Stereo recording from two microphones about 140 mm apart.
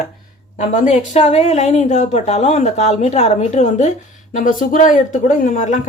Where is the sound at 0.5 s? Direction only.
60° left (ahead or behind).